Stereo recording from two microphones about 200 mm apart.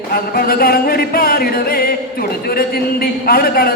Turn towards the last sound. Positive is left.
turn(degrees=50)  # may be behind; listen again after turning